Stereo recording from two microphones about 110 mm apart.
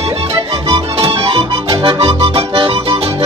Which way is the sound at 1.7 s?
50° right (ahead or behind).